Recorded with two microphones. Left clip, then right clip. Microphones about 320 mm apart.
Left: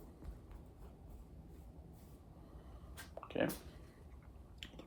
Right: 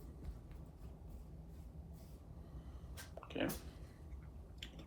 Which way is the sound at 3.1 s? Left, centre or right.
Left.